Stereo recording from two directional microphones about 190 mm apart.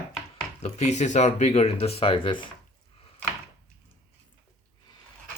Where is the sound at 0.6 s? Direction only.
35° left (ahead or behind).